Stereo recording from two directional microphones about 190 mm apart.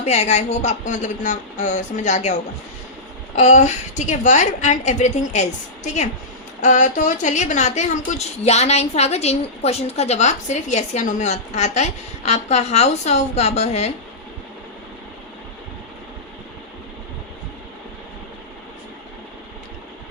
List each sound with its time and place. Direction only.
0.0 s a woman's voice: 35° left (ahead or behind)
3.3 s a woman's voice: 35° left (ahead or behind)